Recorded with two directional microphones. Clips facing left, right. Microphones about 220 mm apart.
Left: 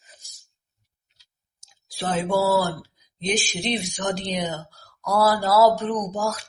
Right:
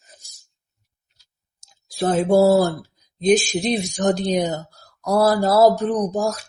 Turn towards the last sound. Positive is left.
turn(degrees=-40)  # may be behind; listen again after turning